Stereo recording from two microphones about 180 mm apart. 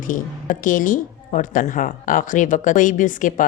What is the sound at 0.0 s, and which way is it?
Speech, 45° left (ahead or behind).